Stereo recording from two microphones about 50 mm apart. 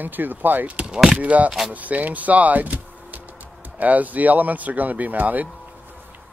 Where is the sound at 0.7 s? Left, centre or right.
Right.